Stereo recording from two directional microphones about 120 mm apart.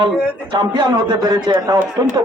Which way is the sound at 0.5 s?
35° right (ahead or behind).